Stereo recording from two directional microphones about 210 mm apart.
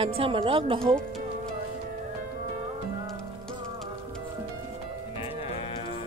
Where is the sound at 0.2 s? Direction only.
25° right (ahead or behind).